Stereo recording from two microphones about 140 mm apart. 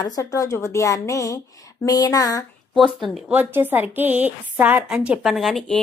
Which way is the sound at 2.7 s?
5° right (ahead or behind).